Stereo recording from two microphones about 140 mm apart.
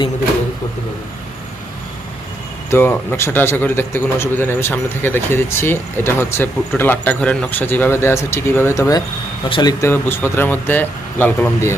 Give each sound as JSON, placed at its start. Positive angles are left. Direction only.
{"t": 2.6, "sound": "a man's voice", "side_deg": 15}
{"t": 9.8, "sound": "a man's voice", "side_deg": 15}